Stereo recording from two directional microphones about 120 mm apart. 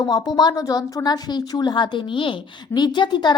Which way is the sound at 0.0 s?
35° left (ahead or behind).